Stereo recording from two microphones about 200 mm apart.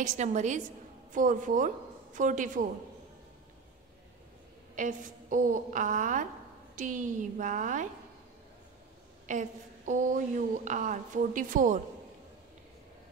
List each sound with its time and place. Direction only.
0.0 s a woman's voice: 35° right (ahead or behind)
4.7 s a woman's voice: 40° right (ahead or behind)
9.3 s a woman's voice: 40° right (ahead or behind)